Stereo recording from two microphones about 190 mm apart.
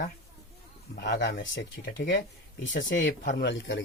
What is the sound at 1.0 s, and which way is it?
Speech, 55° left (ahead or behind).